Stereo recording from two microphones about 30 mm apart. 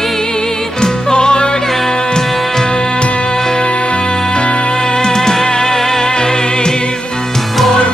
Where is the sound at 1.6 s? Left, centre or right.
Centre.